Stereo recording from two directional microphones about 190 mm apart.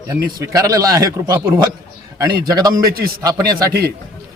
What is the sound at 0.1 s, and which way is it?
A man's voice, 20° right (ahead or behind).